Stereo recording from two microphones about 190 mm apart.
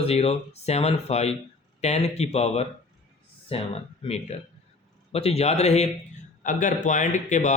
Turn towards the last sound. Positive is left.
turn(degrees=40)  # may be behind; listen again after turning